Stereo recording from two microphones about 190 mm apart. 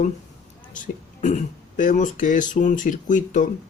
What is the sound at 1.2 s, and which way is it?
Speech, 40° left (ahead or behind).